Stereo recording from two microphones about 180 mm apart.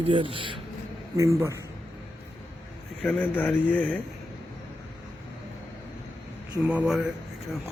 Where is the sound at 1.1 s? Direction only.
15° right (ahead or behind).